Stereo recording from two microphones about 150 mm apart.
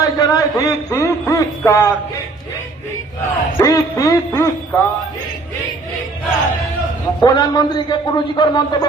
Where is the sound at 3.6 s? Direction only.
25° left (ahead or behind).